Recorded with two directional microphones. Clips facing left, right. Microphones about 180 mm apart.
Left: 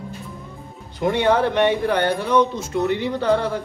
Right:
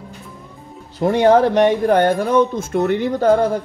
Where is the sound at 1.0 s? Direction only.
40° right (ahead or behind).